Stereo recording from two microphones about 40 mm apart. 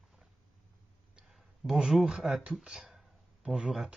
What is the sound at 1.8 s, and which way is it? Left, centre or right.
Speech, centre.